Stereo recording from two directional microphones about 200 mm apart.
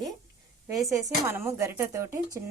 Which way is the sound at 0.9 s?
15° right (ahead or behind).